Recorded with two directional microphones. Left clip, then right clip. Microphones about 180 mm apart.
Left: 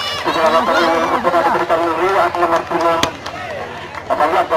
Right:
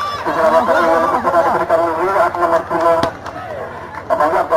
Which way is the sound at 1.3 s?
30° left (ahead or behind).